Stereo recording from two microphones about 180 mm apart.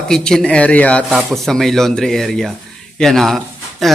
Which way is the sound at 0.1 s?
5° left (ahead or behind).